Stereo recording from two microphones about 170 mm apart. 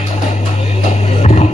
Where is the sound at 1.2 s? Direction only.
40° left (ahead or behind).